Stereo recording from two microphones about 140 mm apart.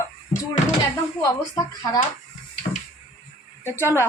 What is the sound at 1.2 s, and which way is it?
Speech, 25° left (ahead or behind).